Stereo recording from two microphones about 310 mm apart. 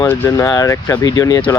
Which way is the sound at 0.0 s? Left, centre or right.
Centre.